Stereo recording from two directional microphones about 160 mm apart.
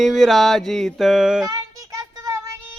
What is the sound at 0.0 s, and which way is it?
Speech, centre (ahead or behind).